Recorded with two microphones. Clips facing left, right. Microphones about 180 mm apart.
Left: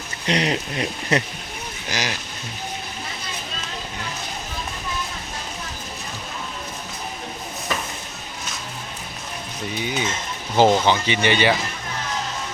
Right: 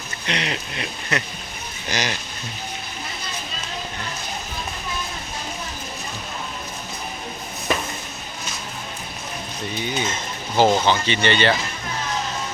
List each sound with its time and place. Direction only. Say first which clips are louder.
0.3 s speech: left 5 dB; 40° left (ahead or behind)
1.9 s speech: right 1 dB; 5° left (ahead or behind)
9.7 s speech: even; 10° left (ahead or behind)